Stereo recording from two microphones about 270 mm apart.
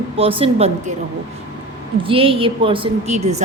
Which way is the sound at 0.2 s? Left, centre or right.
Right.